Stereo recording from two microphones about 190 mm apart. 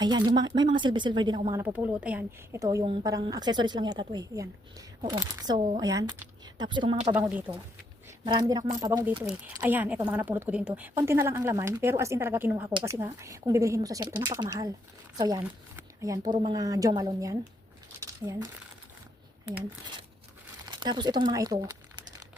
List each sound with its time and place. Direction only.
0.0 s speech: 20° right (ahead or behind)
1.6 s a woman's voice: 10° right (ahead or behind)
2.8 s speech: 25° right (ahead or behind)
5.5 s speech: 40° right (ahead or behind)
5.8 s a woman's voice: 20° right (ahead or behind)
7.1 s a woman's voice: 10° right (ahead or behind)
8.0 s a woman's voice: 25° right (ahead or behind)
9.6 s a woman's voice: 10° right (ahead or behind)
15.7 s a sound: 15° right (ahead or behind)
16.5 s speech: 20° right (ahead or behind)
20.7 s speech: 25° right (ahead or behind)